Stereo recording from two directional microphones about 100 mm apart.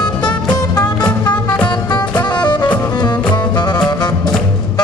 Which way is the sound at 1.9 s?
45° left (ahead or behind).